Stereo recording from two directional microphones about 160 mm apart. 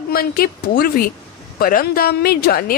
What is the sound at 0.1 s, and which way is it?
Speech, 70° left (ahead or behind).